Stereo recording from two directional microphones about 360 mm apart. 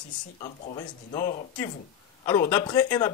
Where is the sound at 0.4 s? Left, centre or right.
Centre.